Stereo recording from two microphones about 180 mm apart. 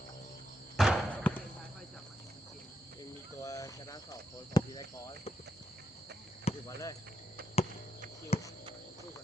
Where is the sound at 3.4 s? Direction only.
20° left (ahead or behind).